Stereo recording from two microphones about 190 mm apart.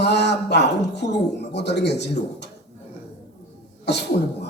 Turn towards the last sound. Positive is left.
turn(degrees=60)  # may be behind; listen again after turning